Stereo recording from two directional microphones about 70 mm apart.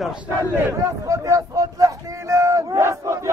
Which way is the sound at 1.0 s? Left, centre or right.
Right.